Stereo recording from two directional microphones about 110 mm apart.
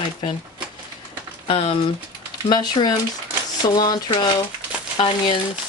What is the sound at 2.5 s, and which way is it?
Speech, 40° left (ahead or behind).